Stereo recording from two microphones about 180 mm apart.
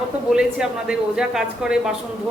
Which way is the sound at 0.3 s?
5° right (ahead or behind).